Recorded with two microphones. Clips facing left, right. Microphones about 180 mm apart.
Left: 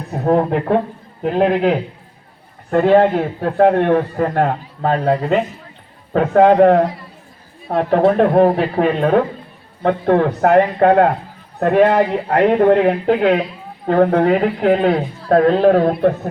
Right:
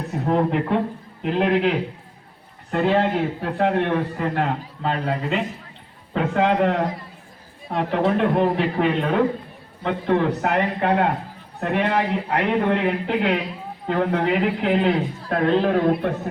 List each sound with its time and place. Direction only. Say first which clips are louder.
0.3 s a man's voice: left 6 dB; 50° left (ahead or behind)